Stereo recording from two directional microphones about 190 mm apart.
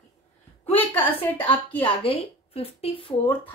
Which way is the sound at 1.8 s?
30° left (ahead or behind).